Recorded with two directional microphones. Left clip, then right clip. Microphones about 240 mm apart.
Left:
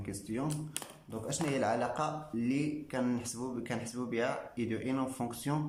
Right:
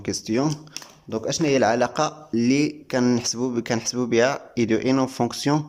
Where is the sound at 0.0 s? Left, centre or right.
Right.